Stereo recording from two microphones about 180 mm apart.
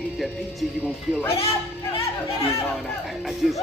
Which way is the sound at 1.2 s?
30° left (ahead or behind).